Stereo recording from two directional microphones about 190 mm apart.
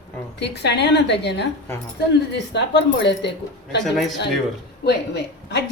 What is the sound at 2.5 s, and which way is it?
Speech, 65° left (ahead or behind).